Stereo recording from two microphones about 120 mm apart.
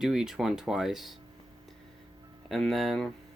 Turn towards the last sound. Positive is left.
turn(degrees=0)  # may be behind; listen again after turning